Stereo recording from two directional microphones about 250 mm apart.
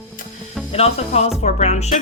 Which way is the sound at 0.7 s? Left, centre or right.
Left.